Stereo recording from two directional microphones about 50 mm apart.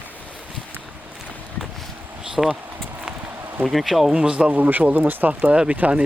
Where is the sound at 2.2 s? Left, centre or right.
Centre.